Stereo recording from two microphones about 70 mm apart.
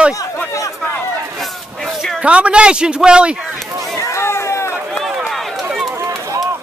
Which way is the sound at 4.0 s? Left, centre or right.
Left.